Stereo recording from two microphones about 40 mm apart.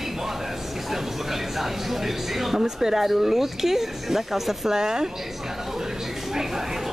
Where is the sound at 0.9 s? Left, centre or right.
Centre.